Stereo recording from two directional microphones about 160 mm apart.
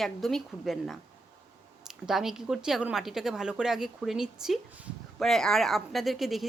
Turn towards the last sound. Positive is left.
turn(degrees=0)  # may be behind; listen again after turning